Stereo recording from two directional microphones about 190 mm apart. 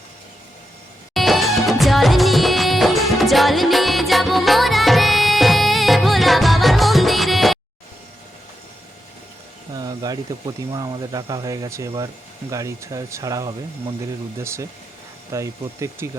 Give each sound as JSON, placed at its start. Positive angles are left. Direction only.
{"t": 1.1, "sound": "music", "side_deg": 0}
{"t": 9.7, "sound": "speech", "side_deg": -20}